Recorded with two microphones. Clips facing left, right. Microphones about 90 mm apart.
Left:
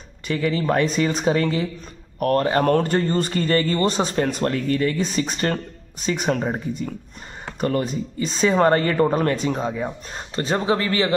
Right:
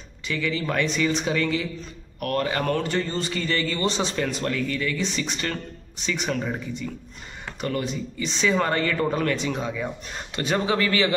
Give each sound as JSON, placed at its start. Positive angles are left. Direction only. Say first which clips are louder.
{"t": 0.3, "sound": "speech", "louder": "left 5 dB", "side_deg": 40}